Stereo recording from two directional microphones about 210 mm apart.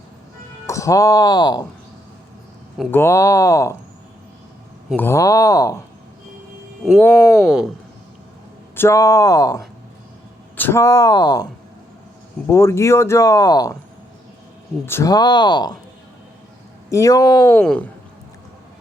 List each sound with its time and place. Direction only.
0.7 s speech: 15° left (ahead or behind)
2.9 s speech: 10° left (ahead or behind)
4.9 s speech: 10° left (ahead or behind)
7.2 s speech: 5° right (ahead or behind)
8.7 s speech: 10° left (ahead or behind)
12.5 s speech: 15° left (ahead or behind)
14.8 s speech: 15° left (ahead or behind)
16.9 s speech: 15° left (ahead or behind)
17.6 s speech: 5° left (ahead or behind)